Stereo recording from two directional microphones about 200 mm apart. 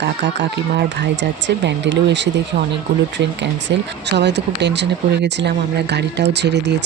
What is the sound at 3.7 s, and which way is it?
Speech, 60° right (ahead or behind).